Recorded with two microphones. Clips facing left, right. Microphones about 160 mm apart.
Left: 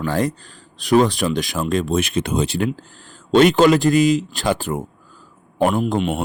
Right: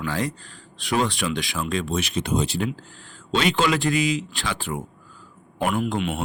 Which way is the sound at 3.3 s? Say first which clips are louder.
Left 9 dB; 50° left (ahead or behind).